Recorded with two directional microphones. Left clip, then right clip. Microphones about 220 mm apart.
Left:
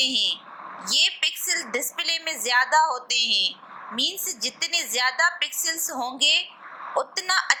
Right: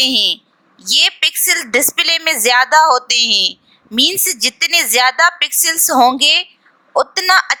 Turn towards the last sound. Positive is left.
turn(degrees=-35)  # may be behind; listen again after turning